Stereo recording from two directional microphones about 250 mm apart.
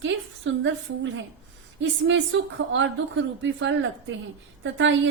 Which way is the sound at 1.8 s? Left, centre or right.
Right.